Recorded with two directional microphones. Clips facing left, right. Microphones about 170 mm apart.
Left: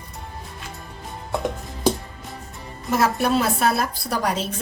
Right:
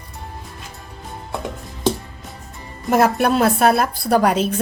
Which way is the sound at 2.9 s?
55° right (ahead or behind).